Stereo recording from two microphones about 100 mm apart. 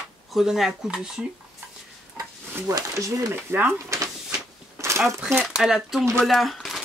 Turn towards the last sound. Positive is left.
turn(degrees=0)  # may be behind; listen again after turning